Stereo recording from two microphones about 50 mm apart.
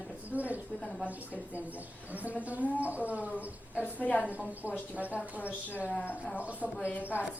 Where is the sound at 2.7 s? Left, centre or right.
Right.